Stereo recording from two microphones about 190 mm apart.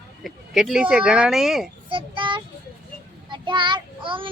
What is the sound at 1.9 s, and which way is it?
Child singing, 25° right (ahead or behind).